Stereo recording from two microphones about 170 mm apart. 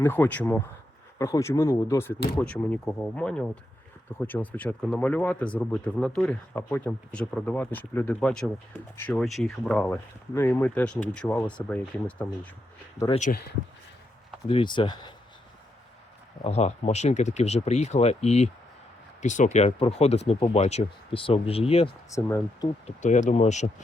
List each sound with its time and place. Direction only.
0.0 s speech: 10° left (ahead or behind)
13.3 s speech: 45° left (ahead or behind)
14.4 s speech: 30° left (ahead or behind)
16.4 s speech: 40° left (ahead or behind)
22.1 s speech: 20° left (ahead or behind)
22.9 s speech: 45° left (ahead or behind)